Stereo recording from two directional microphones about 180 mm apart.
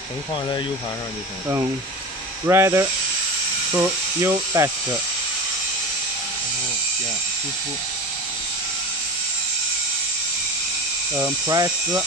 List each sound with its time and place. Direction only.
2.4 s speech: 15° right (ahead or behind)
11.1 s speech: 20° right (ahead or behind)